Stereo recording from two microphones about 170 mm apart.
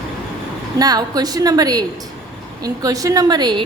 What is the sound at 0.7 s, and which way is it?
A woman's voice, 20° right (ahead or behind).